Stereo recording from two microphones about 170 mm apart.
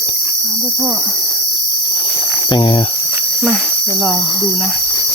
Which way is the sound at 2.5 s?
30° left (ahead or behind).